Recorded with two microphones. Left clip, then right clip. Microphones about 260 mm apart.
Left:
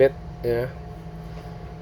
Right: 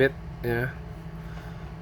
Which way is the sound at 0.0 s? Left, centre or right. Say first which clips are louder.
Left 5 dB; right.